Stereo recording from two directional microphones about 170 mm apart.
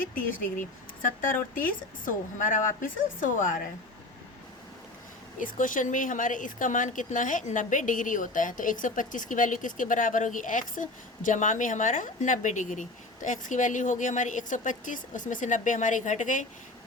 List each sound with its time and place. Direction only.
0.0 s speech: 55° left (ahead or behind)
5.4 s speech: 50° left (ahead or behind)